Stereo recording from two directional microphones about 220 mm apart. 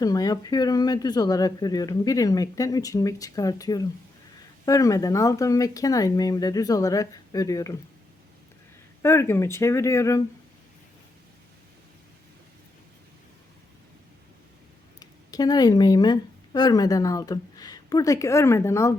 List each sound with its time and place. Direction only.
0.0 s speech: 15° left (ahead or behind)
9.0 s speech: 10° left (ahead or behind)
14.9 s speech: 15° left (ahead or behind)